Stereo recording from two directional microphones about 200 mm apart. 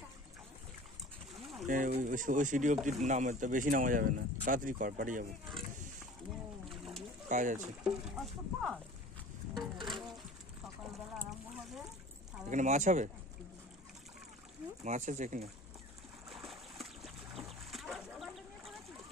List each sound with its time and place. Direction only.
1.7 s speech: 40° right (ahead or behind)
6.7 s splash: centre (ahead or behind)
7.2 s speech: 40° right (ahead or behind)
7.8 s speech: centre (ahead or behind)
9.8 s a sound: centre (ahead or behind)
11.2 s a sound: centre (ahead or behind)
12.4 s speech: 35° right (ahead or behind)
14.9 s speech: 40° right (ahead or behind)
16.3 s boat: centre (ahead or behind)